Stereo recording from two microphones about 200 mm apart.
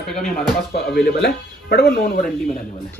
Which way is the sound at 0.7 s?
55° left (ahead or behind).